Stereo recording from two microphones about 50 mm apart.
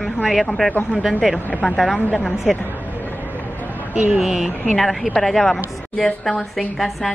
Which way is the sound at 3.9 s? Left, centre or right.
Right.